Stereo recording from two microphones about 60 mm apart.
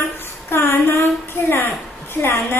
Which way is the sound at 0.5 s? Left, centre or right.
Left.